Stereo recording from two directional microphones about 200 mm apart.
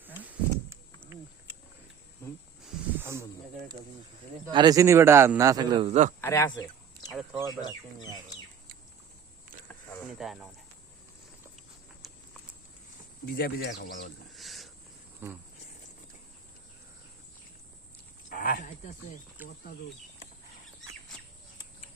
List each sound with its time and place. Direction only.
0.0 s a sound: 10° right (ahead or behind)
2.6 s a sound: 10° right (ahead or behind)
4.5 s a man's voice: 20° right (ahead or behind)
5.9 s speech: 35° right (ahead or behind)
6.2 s speech: 10° left (ahead or behind)
10.1 s speech: centre (ahead or behind)
13.2 s speech: 50° left (ahead or behind)
14.3 s snake: centre (ahead or behind)
15.2 s a man's voice: 10° right (ahead or behind)
18.3 s a sound: 45° left (ahead or behind)
19.4 s a man's voice: 10° right (ahead or behind)